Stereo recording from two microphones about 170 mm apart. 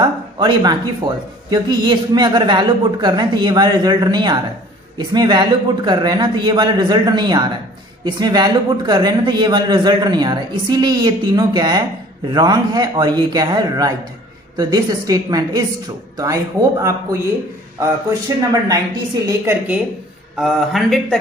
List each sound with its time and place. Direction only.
0.0 s speech: 25° right (ahead or behind)
19.2 s a woman's voice: 15° right (ahead or behind)
20.3 s a man's voice: centre (ahead or behind)